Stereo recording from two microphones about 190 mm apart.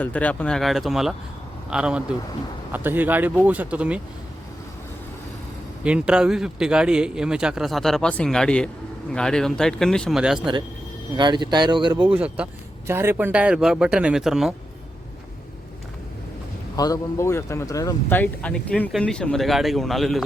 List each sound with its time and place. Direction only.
0.0 s speech: 5° left (ahead or behind)
5.8 s speech: 5° right (ahead or behind)
11.2 s speech: 25° right (ahead or behind)
12.0 s speech: 5° right (ahead or behind)
16.7 s speech: 20° left (ahead or behind); by 20.2 s centre (ahead or behind)